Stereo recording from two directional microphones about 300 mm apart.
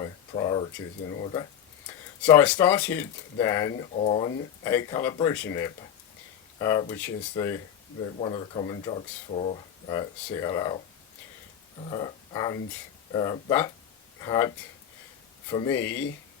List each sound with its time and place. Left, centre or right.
0.0 s a sound: centre
1.2 s speech: centre
3.9 s speech: left
11.9 s speech: centre